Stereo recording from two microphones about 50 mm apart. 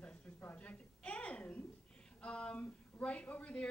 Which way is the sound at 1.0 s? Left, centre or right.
Left.